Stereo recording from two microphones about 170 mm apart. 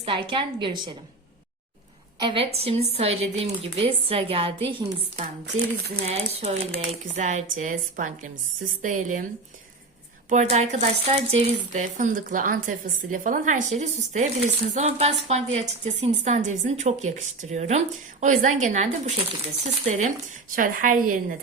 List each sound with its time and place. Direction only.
0.0 s a woman's voice: 30° right (ahead or behind)
2.2 s a woman's voice: 30° right (ahead or behind)
5.1 s speech: 50° right (ahead or behind)
6.1 s speech: 40° right (ahead or behind)
10.2 s speech: 45° right (ahead or behind)
20.6 s speech: 50° right (ahead or behind)